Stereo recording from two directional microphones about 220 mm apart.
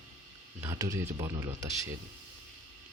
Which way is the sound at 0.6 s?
15° right (ahead or behind).